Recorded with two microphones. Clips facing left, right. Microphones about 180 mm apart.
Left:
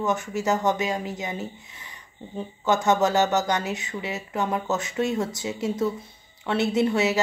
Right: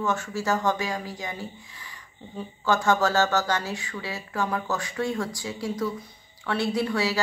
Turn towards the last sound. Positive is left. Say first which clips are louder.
# left 4 dB
turn(degrees=20)  # may be behind; listen again after turning